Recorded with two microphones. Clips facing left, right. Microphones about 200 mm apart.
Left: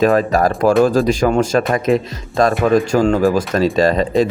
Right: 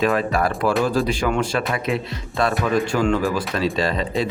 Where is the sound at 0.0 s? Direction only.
40° left (ahead or behind).